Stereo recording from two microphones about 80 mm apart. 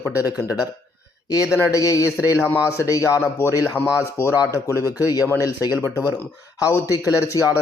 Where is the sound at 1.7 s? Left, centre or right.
Left.